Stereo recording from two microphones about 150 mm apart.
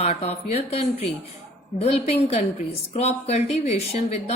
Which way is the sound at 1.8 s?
45° left (ahead or behind).